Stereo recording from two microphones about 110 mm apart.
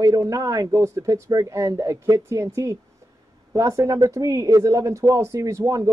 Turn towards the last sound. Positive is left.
turn(degrees=-30)  # may be behind; listen again after turning